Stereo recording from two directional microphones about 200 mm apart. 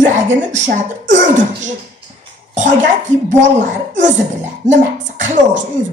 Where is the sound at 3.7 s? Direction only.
35° right (ahead or behind).